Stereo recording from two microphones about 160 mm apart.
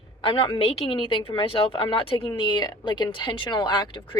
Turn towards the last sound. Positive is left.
turn(degrees=30)  # may be behind; listen again after turning